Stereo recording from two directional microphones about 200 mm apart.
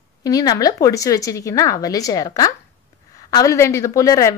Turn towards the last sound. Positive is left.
turn(degrees=15)  # may be behind; listen again after turning